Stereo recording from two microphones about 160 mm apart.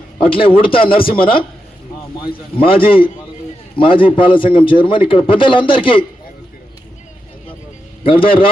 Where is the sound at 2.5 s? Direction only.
70° left (ahead or behind).